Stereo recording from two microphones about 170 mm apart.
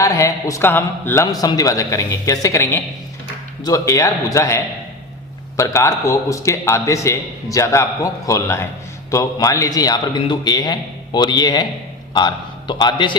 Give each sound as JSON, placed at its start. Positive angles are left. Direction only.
{"t": 0.0, "sound": "a man's voice", "side_deg": 20}